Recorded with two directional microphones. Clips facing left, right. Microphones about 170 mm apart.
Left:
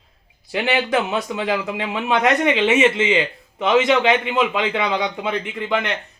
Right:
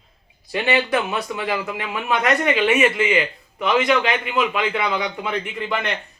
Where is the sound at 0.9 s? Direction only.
20° left (ahead or behind).